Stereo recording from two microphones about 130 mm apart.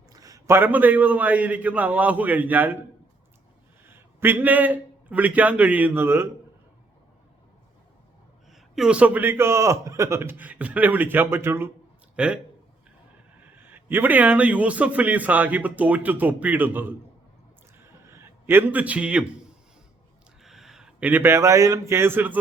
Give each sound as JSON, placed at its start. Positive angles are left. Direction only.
{"t": 0.1, "sound": "a man's voice", "side_deg": -25}
{"t": 3.8, "sound": "a man's voice", "side_deg": -15}
{"t": 8.5, "sound": "a man's voice", "side_deg": -5}
{"t": 13.4, "sound": "a man's voice", "side_deg": -15}
{"t": 18.0, "sound": "a sound", "side_deg": -20}
{"t": 20.4, "sound": "speech", "side_deg": 0}